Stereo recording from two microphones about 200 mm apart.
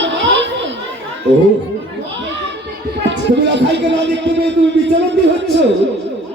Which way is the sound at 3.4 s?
60° right (ahead or behind).